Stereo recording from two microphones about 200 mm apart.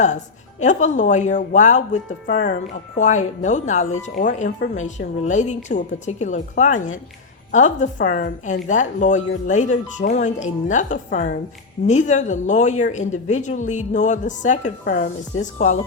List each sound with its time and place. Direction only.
0.6 s speech: 35° left (ahead or behind)